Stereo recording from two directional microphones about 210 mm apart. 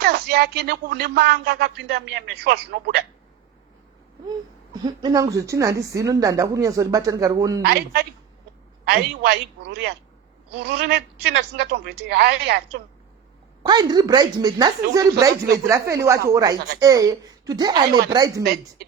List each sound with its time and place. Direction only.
0.0 s speech: 50° right (ahead or behind)
4.3 s speech: 20° right (ahead or behind)
7.6 s speech: 50° right (ahead or behind)
13.6 s speech: 20° right (ahead or behind)